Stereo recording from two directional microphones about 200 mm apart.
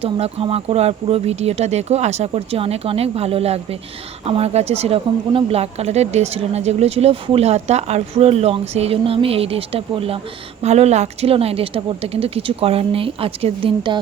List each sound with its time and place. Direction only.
0.0 s speech: 30° right (ahead or behind)